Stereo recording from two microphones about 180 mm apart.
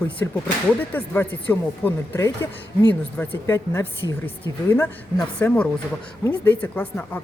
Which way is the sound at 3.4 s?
15° left (ahead or behind).